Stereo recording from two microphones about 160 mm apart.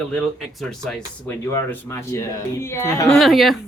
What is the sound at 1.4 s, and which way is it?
Speech, 15° left (ahead or behind).